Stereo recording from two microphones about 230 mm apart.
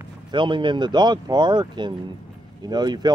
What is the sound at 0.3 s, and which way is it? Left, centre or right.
Speech, right.